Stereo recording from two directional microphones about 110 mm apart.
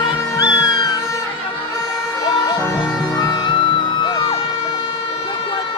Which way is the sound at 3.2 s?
40° left (ahead or behind).